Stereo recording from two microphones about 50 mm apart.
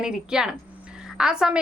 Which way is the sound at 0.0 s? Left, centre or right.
Centre.